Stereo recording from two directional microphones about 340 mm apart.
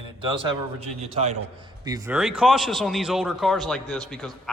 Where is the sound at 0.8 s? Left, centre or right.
Centre.